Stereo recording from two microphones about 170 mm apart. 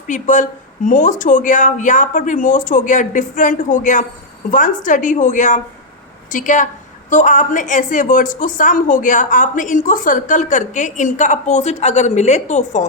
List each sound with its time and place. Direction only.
0.1 s a woman's voice: 45° left (ahead or behind)